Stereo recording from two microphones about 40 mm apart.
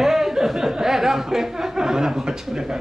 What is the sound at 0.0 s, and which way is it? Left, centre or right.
A man's voice, centre.